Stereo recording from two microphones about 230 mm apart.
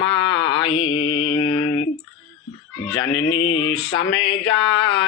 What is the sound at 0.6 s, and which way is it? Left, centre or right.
Mantra, left.